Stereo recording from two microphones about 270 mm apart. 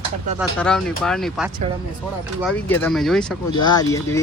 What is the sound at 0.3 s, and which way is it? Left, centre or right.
Speech, centre.